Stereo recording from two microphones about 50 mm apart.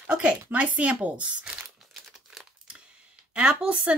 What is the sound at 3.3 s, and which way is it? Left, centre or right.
Speech, centre.